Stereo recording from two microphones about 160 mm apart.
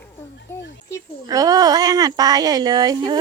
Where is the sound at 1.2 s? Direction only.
20° right (ahead or behind).